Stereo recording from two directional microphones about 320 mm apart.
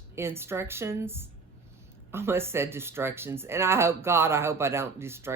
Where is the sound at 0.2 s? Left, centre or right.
Centre.